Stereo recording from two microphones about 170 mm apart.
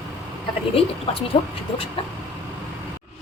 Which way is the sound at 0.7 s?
35° left (ahead or behind).